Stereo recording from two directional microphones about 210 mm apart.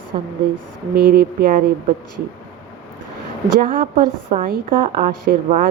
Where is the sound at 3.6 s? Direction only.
40° right (ahead or behind).